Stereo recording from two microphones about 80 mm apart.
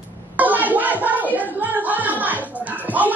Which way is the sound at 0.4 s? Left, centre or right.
Right.